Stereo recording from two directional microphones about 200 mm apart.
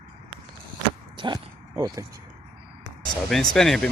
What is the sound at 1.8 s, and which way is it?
Speech, 20° right (ahead or behind).